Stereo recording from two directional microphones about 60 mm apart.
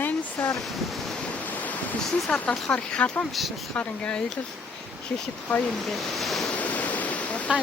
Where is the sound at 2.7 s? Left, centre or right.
Centre.